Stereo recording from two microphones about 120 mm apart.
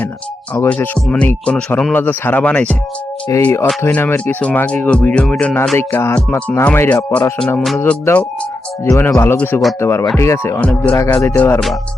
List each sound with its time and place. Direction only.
0.5 s speech: 15° left (ahead or behind)
3.2 s speech: 20° left (ahead or behind)
5.7 s speech: 20° left (ahead or behind)